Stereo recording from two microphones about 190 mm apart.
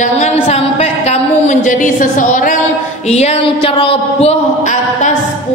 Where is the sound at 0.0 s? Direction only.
40° left (ahead or behind).